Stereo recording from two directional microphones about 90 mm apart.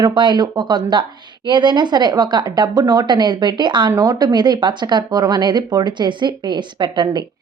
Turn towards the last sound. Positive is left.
turn(degrees=-60)  # may be behind; listen again after turning